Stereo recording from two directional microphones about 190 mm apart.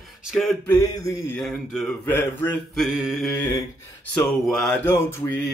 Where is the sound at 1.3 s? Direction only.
5° left (ahead or behind).